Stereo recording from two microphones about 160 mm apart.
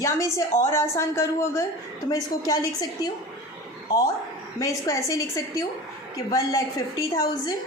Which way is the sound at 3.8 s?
20° left (ahead or behind).